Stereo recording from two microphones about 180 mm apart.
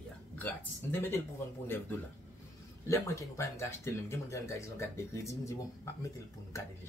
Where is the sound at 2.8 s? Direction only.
15° left (ahead or behind).